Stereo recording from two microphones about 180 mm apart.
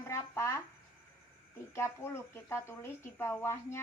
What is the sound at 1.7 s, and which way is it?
A woman's voice, 15° left (ahead or behind).